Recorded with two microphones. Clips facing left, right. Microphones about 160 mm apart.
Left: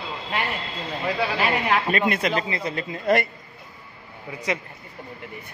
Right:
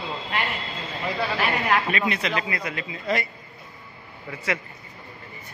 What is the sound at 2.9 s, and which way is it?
Speech, 55° left (ahead or behind).